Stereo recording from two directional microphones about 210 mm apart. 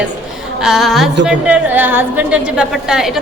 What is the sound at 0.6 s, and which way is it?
A woman's voice, centre (ahead or behind).